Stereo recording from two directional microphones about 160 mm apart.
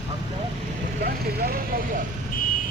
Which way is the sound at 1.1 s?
70° right (ahead or behind).